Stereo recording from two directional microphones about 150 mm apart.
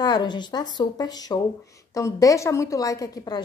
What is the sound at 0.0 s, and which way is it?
A woman's voice, 30° left (ahead or behind).